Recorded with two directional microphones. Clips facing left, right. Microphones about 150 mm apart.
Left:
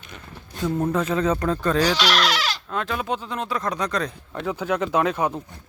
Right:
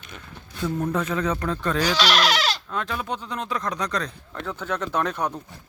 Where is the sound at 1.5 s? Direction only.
Centre (ahead or behind).